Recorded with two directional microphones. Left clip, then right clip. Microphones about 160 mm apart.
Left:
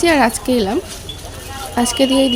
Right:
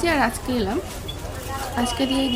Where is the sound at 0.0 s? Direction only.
45° left (ahead or behind).